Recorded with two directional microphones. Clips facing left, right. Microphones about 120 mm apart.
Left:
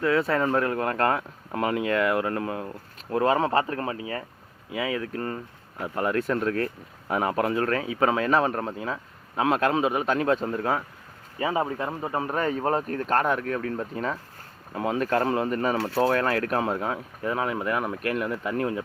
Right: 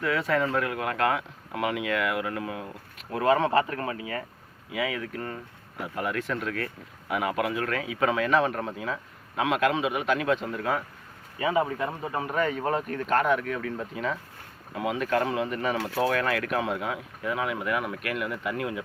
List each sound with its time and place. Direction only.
0.0 s speech: 30° left (ahead or behind)